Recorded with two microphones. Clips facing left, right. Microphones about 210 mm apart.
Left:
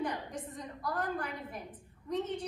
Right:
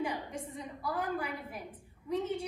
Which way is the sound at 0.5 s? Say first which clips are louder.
Even; 10° right (ahead or behind).